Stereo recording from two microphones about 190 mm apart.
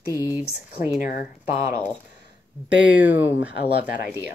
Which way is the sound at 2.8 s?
10° right (ahead or behind).